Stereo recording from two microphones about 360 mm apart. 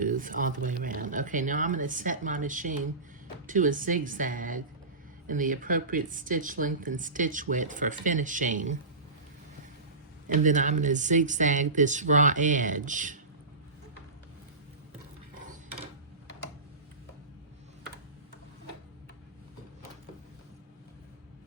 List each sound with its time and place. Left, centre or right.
0.0 s speech: right
10.2 s speech: right